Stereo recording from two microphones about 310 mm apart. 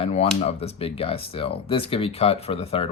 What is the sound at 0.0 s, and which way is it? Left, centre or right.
Speech, centre.